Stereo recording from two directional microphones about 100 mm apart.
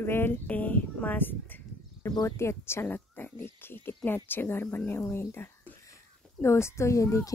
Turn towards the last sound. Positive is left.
turn(degrees=30)  # may be behind; listen again after turning